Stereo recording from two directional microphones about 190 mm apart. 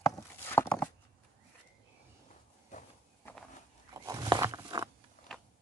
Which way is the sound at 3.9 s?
20° right (ahead or behind).